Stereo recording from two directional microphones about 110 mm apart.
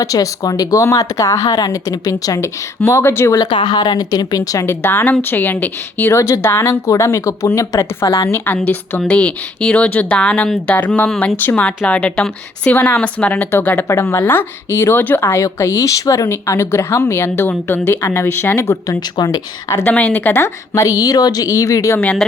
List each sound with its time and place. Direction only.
0.0 s speech: 35° left (ahead or behind)
3.4 s a woman's voice: 45° left (ahead or behind)
8.5 s a woman's voice: 15° left (ahead or behind)
18.9 s speech: 35° left (ahead or behind)
19.8 s a woman's voice: 15° left (ahead or behind); by 21.9 s 30° left (ahead or behind)
21.9 s speech: 15° left (ahead or behind)